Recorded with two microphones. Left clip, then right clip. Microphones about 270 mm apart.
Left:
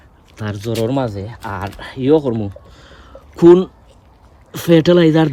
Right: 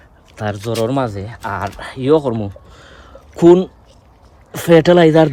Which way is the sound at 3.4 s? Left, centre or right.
Centre.